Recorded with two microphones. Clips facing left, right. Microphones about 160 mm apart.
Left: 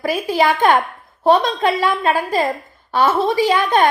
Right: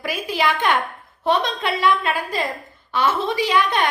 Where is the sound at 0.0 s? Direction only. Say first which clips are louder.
Left 6 dB; 40° left (ahead or behind).